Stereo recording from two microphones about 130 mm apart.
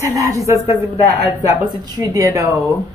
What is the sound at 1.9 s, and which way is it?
Speech, 25° right (ahead or behind).